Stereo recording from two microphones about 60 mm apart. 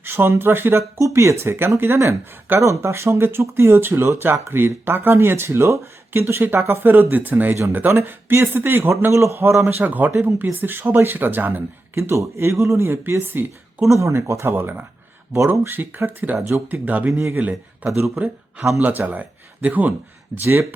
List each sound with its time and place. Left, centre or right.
0.0 s speech: right
0.9 s speech: right
1.5 s speech: right
2.6 s speech: right
9.6 s speech: right
11.9 s speech: right
13.9 s speech: right
14.5 s speech: right
18.8 s speech: right
20.3 s speech: right